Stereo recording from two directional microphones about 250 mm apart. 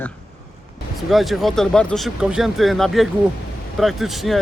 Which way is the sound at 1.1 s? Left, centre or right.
Centre.